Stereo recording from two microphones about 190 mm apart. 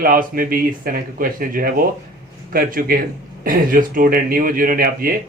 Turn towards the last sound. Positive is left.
turn(degrees=-50)  # may be behind; listen again after turning